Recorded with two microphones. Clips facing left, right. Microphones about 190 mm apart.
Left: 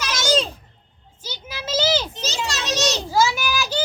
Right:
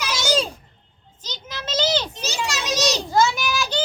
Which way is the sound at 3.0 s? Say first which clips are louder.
Even; 5° left (ahead or behind).